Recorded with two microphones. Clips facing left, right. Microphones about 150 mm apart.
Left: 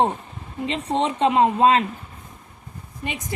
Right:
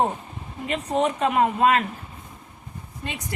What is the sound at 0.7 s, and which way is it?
Speech, 25° left (ahead or behind).